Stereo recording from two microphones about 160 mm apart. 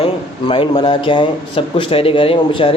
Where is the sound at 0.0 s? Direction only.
35° left (ahead or behind).